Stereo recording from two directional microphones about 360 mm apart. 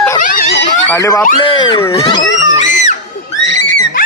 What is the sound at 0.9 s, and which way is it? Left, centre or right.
Speech, centre.